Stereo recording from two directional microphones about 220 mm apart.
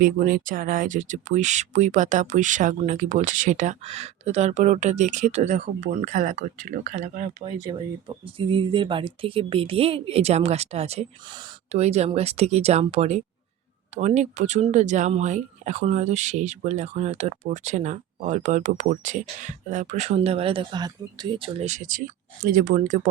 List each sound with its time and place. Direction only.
0.0 s speech: 40° right (ahead or behind)
7.7 s speech: 20° right (ahead or behind)